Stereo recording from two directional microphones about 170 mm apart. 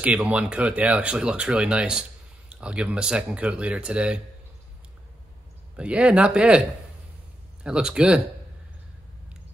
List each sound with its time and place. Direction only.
0.0 s speech: 5° right (ahead or behind)
5.8 s speech: 5° right (ahead or behind)